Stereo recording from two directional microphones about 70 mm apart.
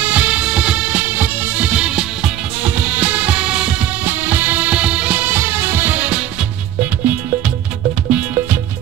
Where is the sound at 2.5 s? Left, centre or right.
Right.